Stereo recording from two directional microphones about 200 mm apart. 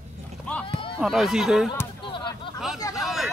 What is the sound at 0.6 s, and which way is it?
Run, 25° left (ahead or behind).